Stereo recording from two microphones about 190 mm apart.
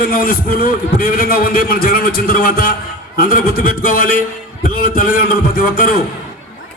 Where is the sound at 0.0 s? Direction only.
50° left (ahead or behind).